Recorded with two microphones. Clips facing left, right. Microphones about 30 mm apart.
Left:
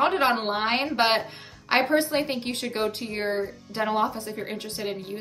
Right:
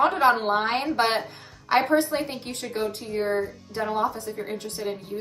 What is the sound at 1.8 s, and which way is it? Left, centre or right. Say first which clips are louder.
Speech: even; left.